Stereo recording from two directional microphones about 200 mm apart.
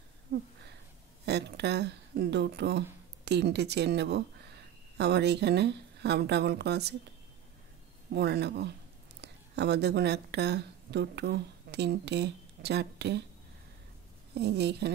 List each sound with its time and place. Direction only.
0.3 s a sound: 50° right (ahead or behind)
1.2 s speech: 55° right (ahead or behind)
8.1 s a woman's voice: 55° right (ahead or behind)
14.3 s a woman's voice: 55° right (ahead or behind)